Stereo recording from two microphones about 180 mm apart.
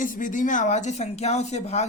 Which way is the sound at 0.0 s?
45° left (ahead or behind).